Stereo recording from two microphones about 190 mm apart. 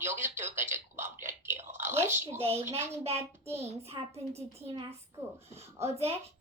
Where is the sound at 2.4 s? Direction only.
30° right (ahead or behind).